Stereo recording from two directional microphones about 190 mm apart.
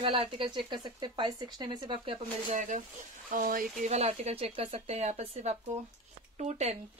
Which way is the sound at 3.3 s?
50° right (ahead or behind).